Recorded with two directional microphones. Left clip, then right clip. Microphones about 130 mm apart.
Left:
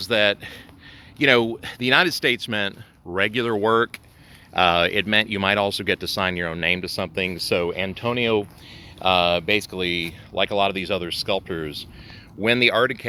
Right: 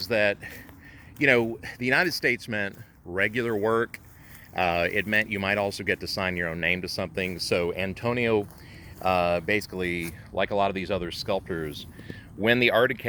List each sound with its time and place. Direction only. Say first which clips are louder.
0.1 s speech: left 4 dB; 40° left (ahead or behind)
1.3 s speech: left 4 dB; 35° left (ahead or behind); by 13.1 s 15° left (ahead or behind)